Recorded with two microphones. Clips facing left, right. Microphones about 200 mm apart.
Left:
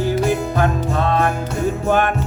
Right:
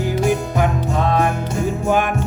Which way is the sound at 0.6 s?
15° right (ahead or behind).